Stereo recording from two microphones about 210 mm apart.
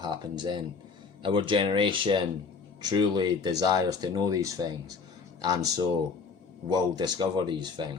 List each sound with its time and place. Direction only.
0.0 s speech: 20° right (ahead or behind)